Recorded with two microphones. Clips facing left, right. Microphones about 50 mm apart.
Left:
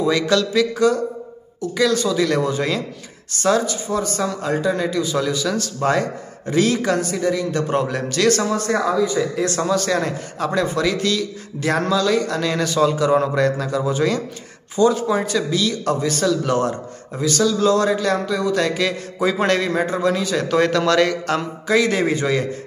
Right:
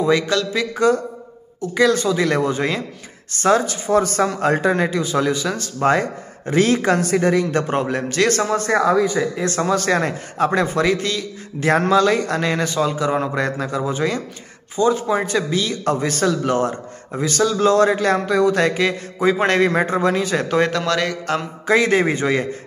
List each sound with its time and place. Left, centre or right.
0.5 s a man's voice: right
3.6 s speech: right
7.6 s speech: right
12.8 s a man's voice: centre
15.2 s speech: right
16.4 s speech: right
17.2 s a man's voice: right
20.5 s a man's voice: centre
20.8 s speech: centre
21.6 s a man's voice: right